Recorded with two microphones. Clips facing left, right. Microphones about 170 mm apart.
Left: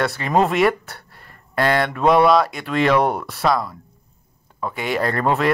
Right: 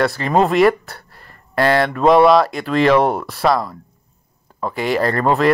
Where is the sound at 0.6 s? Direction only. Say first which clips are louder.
Right 4 dB; centre (ahead or behind).